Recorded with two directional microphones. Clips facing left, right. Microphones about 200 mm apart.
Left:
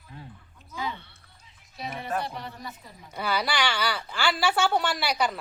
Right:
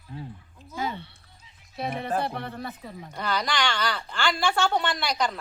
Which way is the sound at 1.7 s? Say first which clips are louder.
Right 3 dB; 55° right (ahead or behind).